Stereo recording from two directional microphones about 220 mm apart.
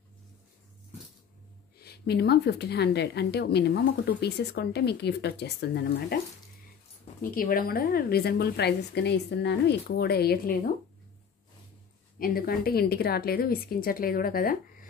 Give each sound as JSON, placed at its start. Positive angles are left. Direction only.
{"t": 1.8, "sound": "speech", "side_deg": 45}
{"t": 7.2, "sound": "speech", "side_deg": 40}
{"t": 12.2, "sound": "speech", "side_deg": 40}